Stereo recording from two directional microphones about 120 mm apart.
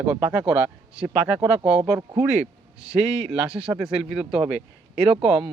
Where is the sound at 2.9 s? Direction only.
5° right (ahead or behind).